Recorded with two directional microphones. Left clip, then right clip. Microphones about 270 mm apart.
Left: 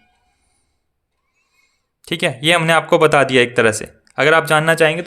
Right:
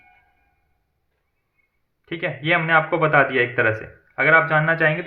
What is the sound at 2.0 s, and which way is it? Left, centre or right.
Speech, left.